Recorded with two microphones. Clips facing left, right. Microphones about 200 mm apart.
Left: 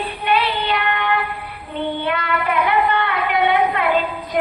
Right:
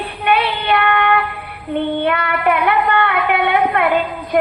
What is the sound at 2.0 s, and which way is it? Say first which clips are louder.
Child singing: right 4 dB; 55° right (ahead or behind).